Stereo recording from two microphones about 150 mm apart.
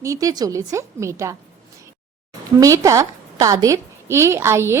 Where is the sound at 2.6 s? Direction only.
20° right (ahead or behind).